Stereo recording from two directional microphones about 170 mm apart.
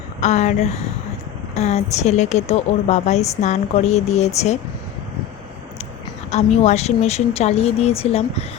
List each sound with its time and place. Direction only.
0.2 s a woman's voice: 45° left (ahead or behind)
6.3 s a woman's voice: 40° left (ahead or behind)